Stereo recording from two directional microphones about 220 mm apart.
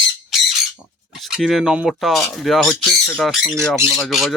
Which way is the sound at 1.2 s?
Centre (ahead or behind).